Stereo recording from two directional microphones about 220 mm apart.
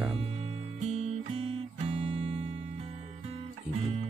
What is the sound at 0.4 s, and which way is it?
Music, 25° right (ahead or behind).